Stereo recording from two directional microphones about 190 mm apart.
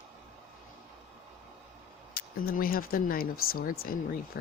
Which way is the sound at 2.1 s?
50° left (ahead or behind).